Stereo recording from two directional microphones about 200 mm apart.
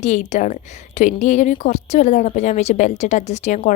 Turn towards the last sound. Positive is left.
turn(degrees=35)  # may be behind; listen again after turning